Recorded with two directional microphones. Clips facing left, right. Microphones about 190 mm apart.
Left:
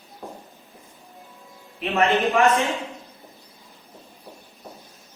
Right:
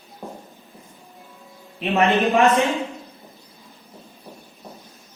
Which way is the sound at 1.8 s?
15° right (ahead or behind).